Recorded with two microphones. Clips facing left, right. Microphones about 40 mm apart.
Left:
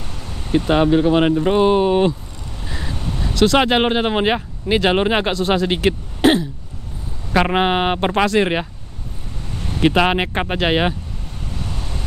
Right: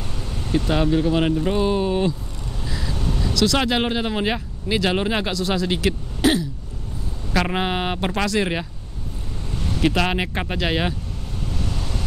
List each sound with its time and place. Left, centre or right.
0.0 s vehicle: centre
0.5 s speech: left
2.6 s vehicle: left
3.0 s crow: centre
3.3 s speech: left
11.5 s vehicle: centre